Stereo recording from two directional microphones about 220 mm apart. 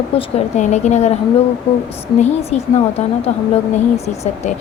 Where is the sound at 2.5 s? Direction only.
30° left (ahead or behind).